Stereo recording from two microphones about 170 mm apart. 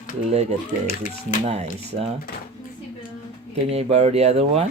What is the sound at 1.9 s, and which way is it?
Speech, 45° right (ahead or behind).